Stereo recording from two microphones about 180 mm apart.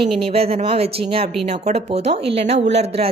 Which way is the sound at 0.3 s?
35° right (ahead or behind).